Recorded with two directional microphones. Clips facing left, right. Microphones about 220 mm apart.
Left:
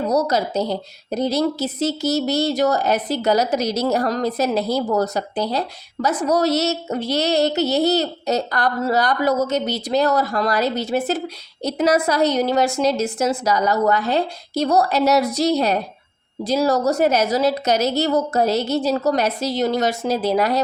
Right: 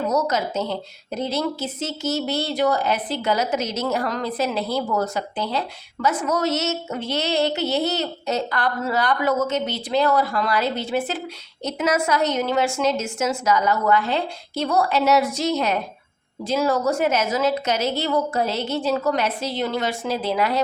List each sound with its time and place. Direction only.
0.1 s a woman's voice: 35° left (ahead or behind)